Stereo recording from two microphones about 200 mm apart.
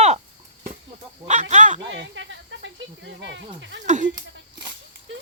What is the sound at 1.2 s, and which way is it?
Speech, 35° right (ahead or behind).